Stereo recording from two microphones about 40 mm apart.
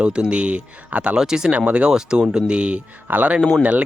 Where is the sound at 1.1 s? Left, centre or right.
Centre.